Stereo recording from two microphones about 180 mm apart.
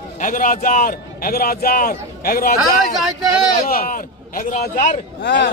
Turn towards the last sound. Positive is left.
turn(degrees=75)  # may be behind; listen again after turning